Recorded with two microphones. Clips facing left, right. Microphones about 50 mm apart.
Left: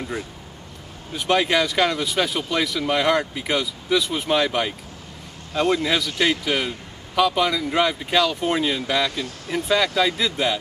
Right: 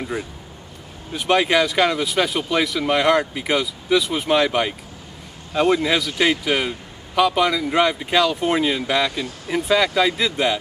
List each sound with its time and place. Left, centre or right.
1.1 s a man's voice: centre